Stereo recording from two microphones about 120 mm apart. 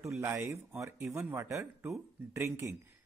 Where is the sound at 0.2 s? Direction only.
20° right (ahead or behind).